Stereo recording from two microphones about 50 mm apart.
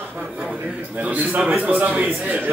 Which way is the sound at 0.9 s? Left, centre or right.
Right.